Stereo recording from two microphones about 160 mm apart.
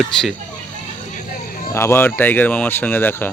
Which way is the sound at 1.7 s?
15° left (ahead or behind).